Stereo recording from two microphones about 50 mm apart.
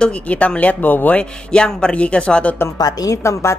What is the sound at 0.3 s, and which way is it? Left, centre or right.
Speech, left.